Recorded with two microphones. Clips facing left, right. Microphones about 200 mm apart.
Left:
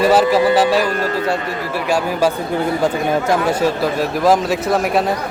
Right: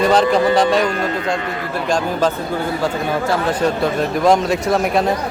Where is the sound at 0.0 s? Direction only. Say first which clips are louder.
Left 1 dB; 5° left (ahead or behind).